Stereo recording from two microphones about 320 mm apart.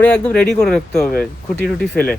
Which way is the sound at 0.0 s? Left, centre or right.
Centre.